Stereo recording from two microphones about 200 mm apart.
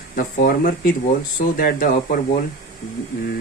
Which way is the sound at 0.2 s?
45° left (ahead or behind).